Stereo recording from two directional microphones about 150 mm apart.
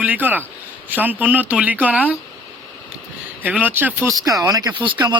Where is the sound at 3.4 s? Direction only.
10° right (ahead or behind).